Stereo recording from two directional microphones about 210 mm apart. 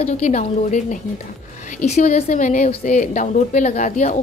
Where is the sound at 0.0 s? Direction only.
35° left (ahead or behind).